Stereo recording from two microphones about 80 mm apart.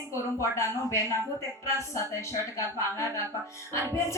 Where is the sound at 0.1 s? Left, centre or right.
Left.